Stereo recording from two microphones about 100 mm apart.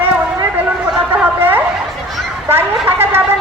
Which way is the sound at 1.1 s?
20° right (ahead or behind).